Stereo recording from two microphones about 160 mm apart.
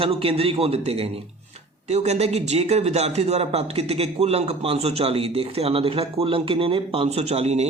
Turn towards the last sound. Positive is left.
turn(degrees=-40)  # may be behind; listen again after turning